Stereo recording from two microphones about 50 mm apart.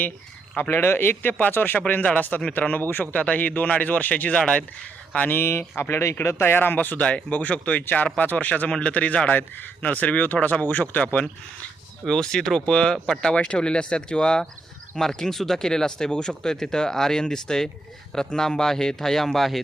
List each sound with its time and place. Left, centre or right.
0.5 s a man's voice: left
1.9 s a man's voice: left
5.3 s a man's voice: left
7.0 s a man's voice: left
12.0 s speech: centre